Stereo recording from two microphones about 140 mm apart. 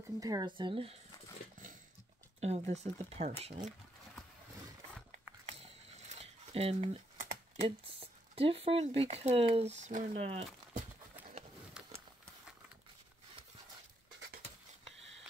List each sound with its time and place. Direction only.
0.2 s speech: 25° right (ahead or behind)
2.4 s speech: 50° right (ahead or behind)
5.5 s mechanisms: 55° right (ahead or behind)
7.6 s speech: 45° right (ahead or behind)
10.7 s horse: 75° right (ahead or behind)